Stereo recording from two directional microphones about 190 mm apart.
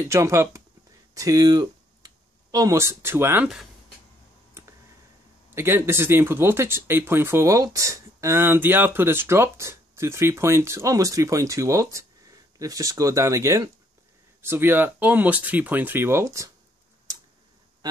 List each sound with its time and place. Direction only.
0.1 s speech: 15° right (ahead or behind)
5.5 s speech: 10° right (ahead or behind)